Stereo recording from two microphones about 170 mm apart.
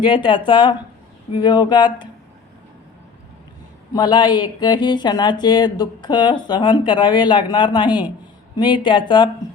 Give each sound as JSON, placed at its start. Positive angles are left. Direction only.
{"t": 0.0, "sound": "speech", "side_deg": 30}
{"t": 3.9, "sound": "speech", "side_deg": 25}